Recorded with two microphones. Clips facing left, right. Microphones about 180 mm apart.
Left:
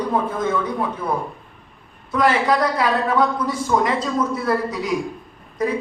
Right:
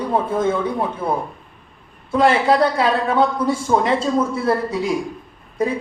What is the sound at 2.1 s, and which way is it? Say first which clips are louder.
A man's voice: right 3 dB; 25° right (ahead or behind).